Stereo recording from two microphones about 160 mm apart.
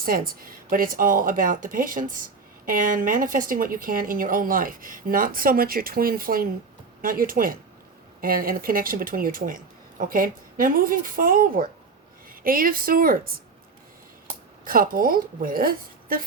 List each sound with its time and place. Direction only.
0.0 s speech: 65° right (ahead or behind)
14.6 s speech: 60° right (ahead or behind)